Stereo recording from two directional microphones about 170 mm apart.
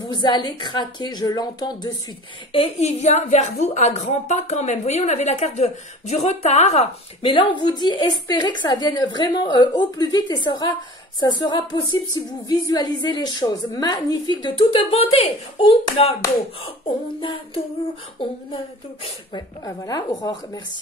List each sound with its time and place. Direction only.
0.0 s a woman's voice: 25° left (ahead or behind)
2.5 s a woman's voice: 35° left (ahead or behind)
16.6 s child singing: 35° left (ahead or behind)
19.3 s a woman's voice: 20° left (ahead or behind)